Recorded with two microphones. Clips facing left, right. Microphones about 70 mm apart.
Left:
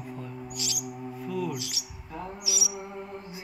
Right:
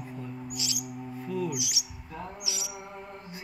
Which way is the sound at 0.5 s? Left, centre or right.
Right.